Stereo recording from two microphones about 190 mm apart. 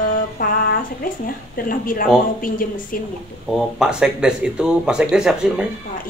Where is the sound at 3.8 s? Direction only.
5° right (ahead or behind).